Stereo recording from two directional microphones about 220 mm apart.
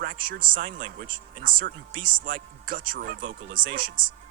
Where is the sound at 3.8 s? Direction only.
20° right (ahead or behind).